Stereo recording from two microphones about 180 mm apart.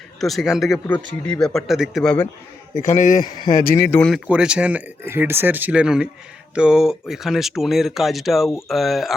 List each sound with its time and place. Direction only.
0.2 s speech: centre (ahead or behind)
2.8 s speech: 45° left (ahead or behind)
3.8 s speech: 10° left (ahead or behind)
4.1 s speech: 5° right (ahead or behind)